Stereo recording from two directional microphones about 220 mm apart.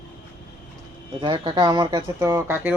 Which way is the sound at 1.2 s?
20° right (ahead or behind).